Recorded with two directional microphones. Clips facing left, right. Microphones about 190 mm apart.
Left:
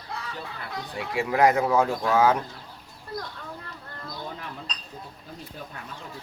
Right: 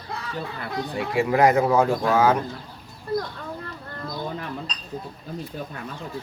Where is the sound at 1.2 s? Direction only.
5° right (ahead or behind).